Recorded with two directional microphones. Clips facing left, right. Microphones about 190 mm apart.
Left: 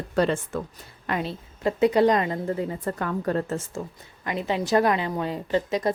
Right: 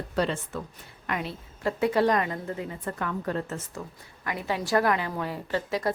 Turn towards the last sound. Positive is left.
turn(degrees=20)  # may be behind; listen again after turning